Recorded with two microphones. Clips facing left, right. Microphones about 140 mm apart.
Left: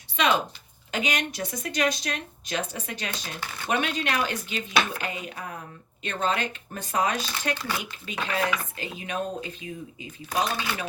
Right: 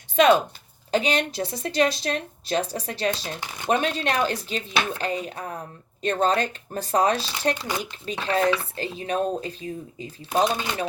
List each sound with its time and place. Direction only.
0.2 s speech: 45° right (ahead or behind)
0.9 s speech: 35° right (ahead or behind)
7.5 s speech: 20° right (ahead or behind)
7.8 s speech: 35° right (ahead or behind)
10.3 s speech: 20° right (ahead or behind)